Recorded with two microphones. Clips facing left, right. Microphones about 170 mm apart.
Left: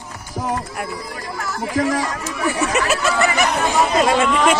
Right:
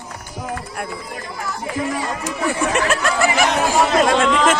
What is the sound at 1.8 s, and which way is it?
Speech, 90° left.